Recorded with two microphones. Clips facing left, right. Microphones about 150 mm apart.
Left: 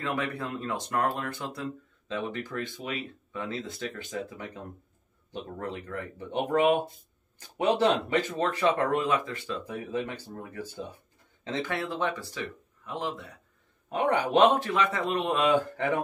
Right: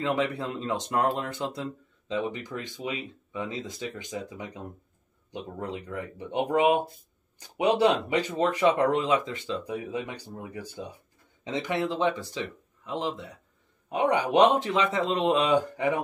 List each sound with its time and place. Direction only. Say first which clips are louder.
0.0 s speech: right 4 dB; 20° right (ahead or behind)